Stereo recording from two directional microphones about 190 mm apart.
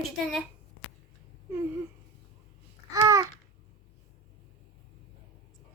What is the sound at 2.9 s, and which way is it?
Babbling, 20° right (ahead or behind).